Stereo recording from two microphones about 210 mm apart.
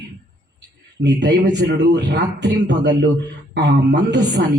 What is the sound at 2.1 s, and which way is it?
Speech, 55° right (ahead or behind).